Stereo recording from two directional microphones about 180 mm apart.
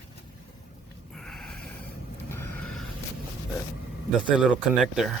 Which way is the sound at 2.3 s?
10° left (ahead or behind).